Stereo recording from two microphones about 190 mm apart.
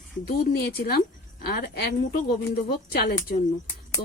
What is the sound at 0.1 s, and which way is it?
Speech, 45° left (ahead or behind).